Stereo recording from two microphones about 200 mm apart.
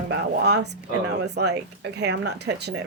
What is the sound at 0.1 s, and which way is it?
Speech, 55° right (ahead or behind).